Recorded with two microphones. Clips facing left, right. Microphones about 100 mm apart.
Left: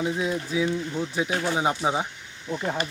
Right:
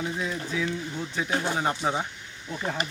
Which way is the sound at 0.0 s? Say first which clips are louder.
Left 4 dB; 15° left (ahead or behind).